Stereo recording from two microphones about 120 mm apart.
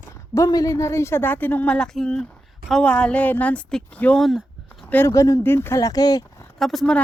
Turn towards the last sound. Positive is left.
turn(degrees=0)  # may be behind; listen again after turning